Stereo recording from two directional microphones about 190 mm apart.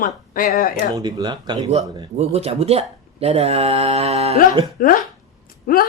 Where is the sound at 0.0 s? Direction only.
45° left (ahead or behind).